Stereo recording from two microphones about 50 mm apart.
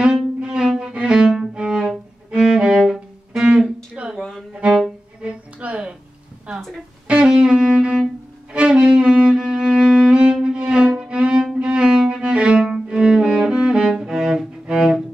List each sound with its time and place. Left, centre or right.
0.0 s music: centre
2.9 s bowed string instrument: centre
3.9 s a sound: centre
5.2 s music: right
7.1 s music: centre
10.4 s violin: centre
12.8 s cello: centre